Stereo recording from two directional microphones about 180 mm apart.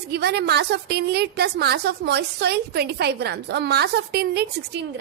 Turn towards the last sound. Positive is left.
turn(degrees=-65)  # may be behind; listen again after turning